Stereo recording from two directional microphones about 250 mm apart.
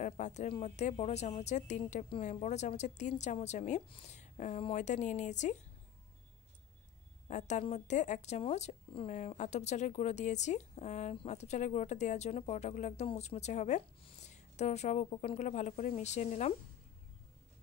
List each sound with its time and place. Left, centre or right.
0.0 s speech: left
7.2 s speech: left